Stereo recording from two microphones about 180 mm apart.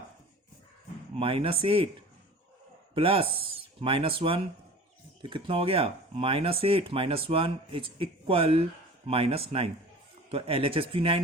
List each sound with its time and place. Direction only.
1.1 s speech: 30° right (ahead or behind)